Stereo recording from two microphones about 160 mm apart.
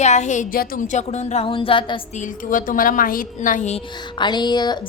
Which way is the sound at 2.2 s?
60° left (ahead or behind).